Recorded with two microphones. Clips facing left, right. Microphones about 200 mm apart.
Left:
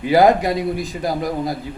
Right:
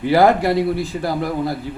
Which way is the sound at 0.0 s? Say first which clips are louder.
Even; 15° left (ahead or behind).